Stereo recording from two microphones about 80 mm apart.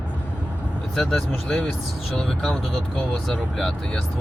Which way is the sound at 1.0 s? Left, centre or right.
Centre.